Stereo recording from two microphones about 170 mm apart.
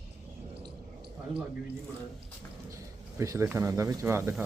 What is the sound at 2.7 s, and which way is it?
Speech, 20° right (ahead or behind).